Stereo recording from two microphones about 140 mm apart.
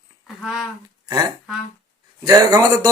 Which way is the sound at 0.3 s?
Centre (ahead or behind).